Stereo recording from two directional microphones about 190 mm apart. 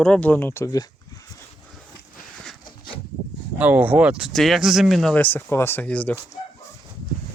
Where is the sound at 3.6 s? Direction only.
10° right (ahead or behind); by 6.1 s 10° left (ahead or behind).